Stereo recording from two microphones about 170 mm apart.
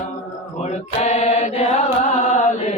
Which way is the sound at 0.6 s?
40° left (ahead or behind).